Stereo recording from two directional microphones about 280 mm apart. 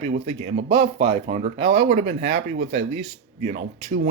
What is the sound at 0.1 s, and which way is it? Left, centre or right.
Speech, right.